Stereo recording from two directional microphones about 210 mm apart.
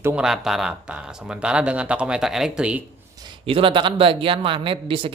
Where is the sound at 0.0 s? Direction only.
5° right (ahead or behind).